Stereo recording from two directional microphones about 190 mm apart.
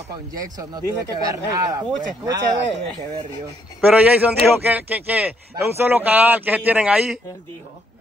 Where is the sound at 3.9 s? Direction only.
10° right (ahead or behind).